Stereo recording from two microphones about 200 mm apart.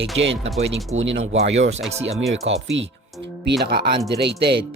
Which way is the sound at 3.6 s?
50° right (ahead or behind).